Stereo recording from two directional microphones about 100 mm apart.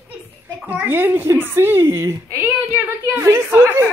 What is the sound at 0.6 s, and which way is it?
A woman's voice, 15° right (ahead or behind).